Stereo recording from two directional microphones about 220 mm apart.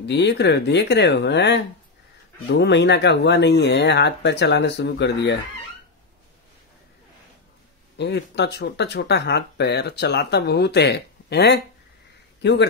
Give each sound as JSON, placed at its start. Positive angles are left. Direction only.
{"t": 0.0, "sound": "speech", "side_deg": 50}
{"t": 8.0, "sound": "a man's voice", "side_deg": 50}